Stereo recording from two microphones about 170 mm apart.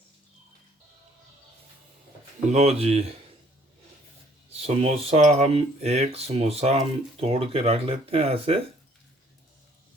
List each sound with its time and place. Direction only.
2.5 s speech: 40° right (ahead or behind)
4.5 s speech: 35° right (ahead or behind)